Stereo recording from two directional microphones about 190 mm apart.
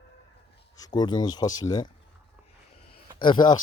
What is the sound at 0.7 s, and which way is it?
Speech, 20° left (ahead or behind).